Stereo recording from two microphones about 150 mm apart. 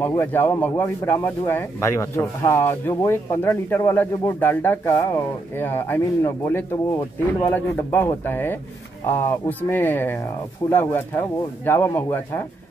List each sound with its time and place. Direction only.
0.3 s speech: 15° left (ahead or behind)